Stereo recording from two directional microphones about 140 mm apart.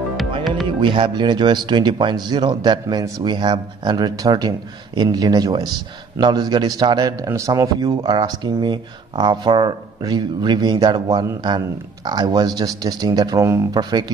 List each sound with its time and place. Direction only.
0.7 s speech: 35° right (ahead or behind)